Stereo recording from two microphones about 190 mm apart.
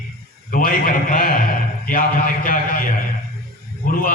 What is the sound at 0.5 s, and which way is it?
A man's voice, 45° left (ahead or behind).